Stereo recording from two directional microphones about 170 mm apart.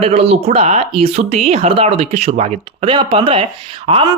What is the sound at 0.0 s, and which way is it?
A woman's voice, 35° right (ahead or behind).